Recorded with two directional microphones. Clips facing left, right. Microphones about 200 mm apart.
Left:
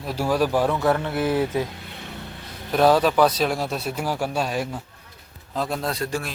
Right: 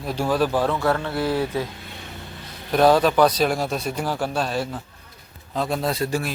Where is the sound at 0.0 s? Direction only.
5° left (ahead or behind); by 1.6 s 20° left (ahead or behind).